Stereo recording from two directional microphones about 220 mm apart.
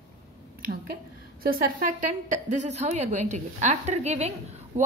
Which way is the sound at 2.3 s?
35° right (ahead or behind).